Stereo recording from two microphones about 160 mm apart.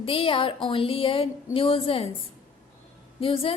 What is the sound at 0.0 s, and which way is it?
A woman's voice, 35° left (ahead or behind).